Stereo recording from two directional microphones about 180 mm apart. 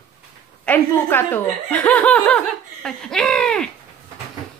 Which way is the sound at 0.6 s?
10° left (ahead or behind).